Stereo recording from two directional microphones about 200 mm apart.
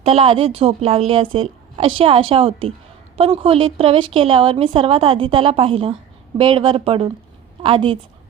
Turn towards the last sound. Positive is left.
turn(degrees=-25)  # may be behind; listen again after turning